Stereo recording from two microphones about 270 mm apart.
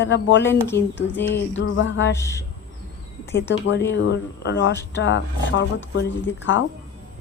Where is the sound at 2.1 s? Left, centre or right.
Centre.